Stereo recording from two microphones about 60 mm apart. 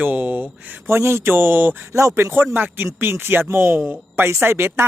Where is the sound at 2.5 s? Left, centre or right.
Right.